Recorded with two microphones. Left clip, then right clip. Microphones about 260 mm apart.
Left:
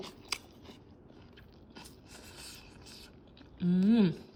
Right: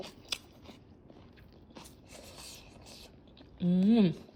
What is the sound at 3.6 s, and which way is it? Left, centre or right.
Speech, left.